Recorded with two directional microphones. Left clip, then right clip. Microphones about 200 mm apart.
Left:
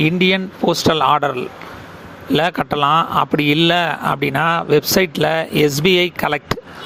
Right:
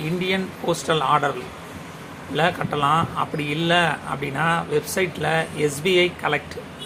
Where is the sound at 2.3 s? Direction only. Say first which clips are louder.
Left 5 dB; 45° left (ahead or behind).